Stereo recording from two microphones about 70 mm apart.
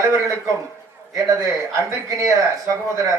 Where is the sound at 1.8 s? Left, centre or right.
Right.